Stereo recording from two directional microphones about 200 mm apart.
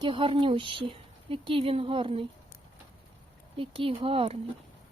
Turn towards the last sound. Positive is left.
turn(degrees=-30)  # may be behind; listen again after turning